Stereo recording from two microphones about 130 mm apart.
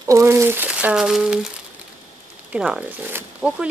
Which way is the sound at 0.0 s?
20° right (ahead or behind).